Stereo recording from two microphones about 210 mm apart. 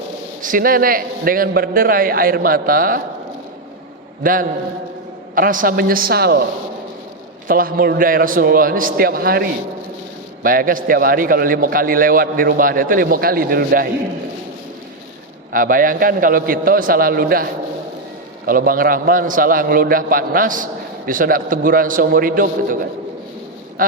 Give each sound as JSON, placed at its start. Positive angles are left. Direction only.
{"t": 0.4, "sound": "a man's voice", "side_deg": -40}
{"t": 4.2, "sound": "a man's voice", "side_deg": -40}
{"t": 7.4, "sound": "a man's voice", "side_deg": -45}
{"t": 15.5, "sound": "a man's voice", "side_deg": -40}